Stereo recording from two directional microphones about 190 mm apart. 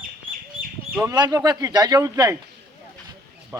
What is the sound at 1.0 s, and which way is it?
Speech, 20° right (ahead or behind).